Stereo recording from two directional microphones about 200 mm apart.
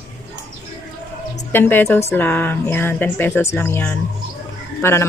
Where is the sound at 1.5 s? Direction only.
10° left (ahead or behind).